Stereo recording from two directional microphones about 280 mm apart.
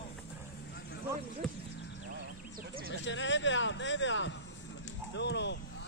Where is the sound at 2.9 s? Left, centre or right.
Left.